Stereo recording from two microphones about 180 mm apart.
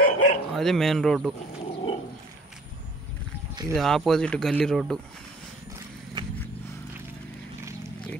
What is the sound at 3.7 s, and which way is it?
Speech, centre (ahead or behind).